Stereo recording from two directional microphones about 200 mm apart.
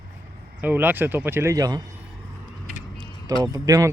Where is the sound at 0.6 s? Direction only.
10° right (ahead or behind).